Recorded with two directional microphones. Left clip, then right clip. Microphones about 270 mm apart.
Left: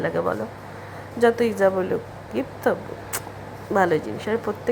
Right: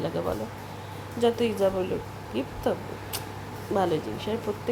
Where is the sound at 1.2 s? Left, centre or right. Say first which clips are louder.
Left 5 dB; centre.